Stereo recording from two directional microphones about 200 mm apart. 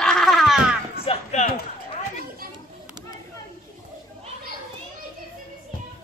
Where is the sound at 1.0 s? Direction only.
30° left (ahead or behind).